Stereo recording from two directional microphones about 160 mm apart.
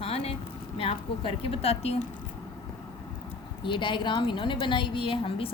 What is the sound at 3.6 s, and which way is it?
A woman's voice, 30° left (ahead or behind).